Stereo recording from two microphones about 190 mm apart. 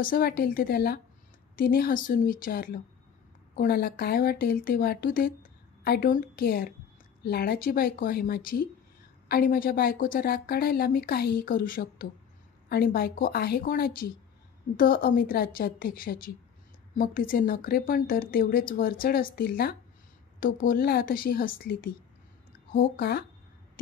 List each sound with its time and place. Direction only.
0.0 s a woman's voice: 50° left (ahead or behind)